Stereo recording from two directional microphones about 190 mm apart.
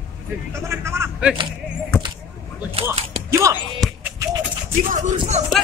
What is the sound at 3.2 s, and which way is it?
Music, 15° right (ahead or behind).